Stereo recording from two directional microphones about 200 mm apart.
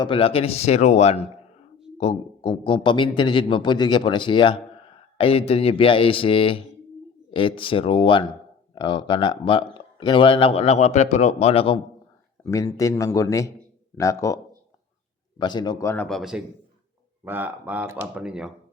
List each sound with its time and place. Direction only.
0.0 s a man's voice: 25° left (ahead or behind)
12.4 s a man's voice: 15° left (ahead or behind)
15.4 s a man's voice: 20° left (ahead or behind); by 18.5 s 5° right (ahead or behind)